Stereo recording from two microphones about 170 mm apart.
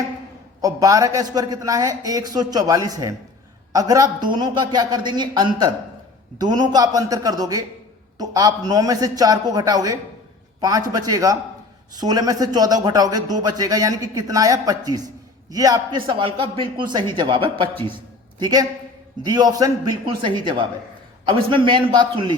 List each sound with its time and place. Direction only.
0.6 s a man's voice: 20° right (ahead or behind)